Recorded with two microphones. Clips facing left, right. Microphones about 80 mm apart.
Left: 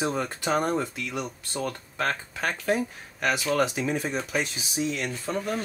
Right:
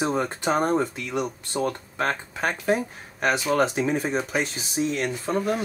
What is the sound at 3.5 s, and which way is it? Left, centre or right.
Speech, right.